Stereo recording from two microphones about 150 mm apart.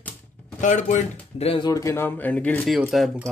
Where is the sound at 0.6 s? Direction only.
55° left (ahead or behind).